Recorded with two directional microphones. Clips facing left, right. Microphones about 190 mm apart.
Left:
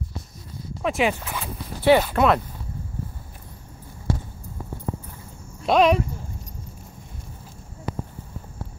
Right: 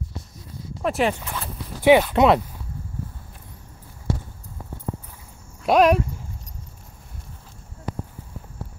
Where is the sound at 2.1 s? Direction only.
25° right (ahead or behind).